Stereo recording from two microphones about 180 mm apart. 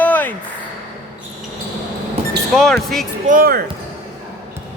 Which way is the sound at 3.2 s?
50° right (ahead or behind).